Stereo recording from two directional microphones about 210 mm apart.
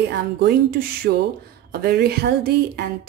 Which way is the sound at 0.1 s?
50° right (ahead or behind).